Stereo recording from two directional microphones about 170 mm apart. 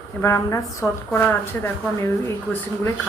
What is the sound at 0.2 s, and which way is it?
A woman's voice, 15° left (ahead or behind).